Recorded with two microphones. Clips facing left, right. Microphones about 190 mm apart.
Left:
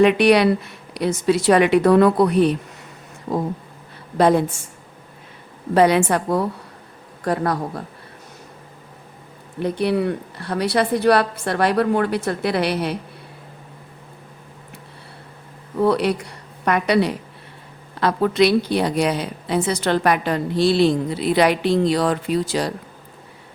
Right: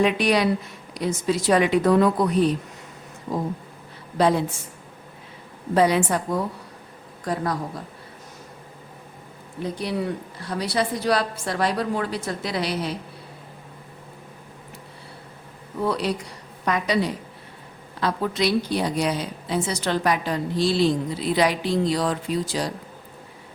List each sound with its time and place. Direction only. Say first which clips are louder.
0.0 s speech: left 6 dB; 65° left (ahead or behind)
4.2 s a woman's voice: left 4 dB; 55° left (ahead or behind)
5.7 s a woman's voice: left 4 dB; 65° left (ahead or behind)
9.6 s a woman's voice: left 7 dB; 65° left (ahead or behind)
15.8 s a woman's voice: left 6 dB; 65° left (ahead or behind)